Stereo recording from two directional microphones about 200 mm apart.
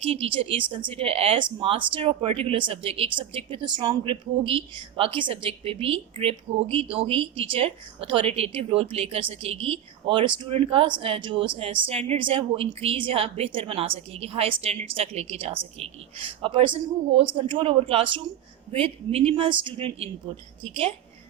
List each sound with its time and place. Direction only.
0.0 s speech: 30° right (ahead or behind)